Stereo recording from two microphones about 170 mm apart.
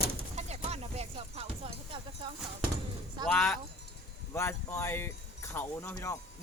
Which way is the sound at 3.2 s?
10° left (ahead or behind).